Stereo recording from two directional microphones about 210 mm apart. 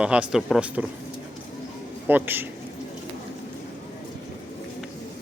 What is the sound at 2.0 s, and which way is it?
Speech, 10° right (ahead or behind).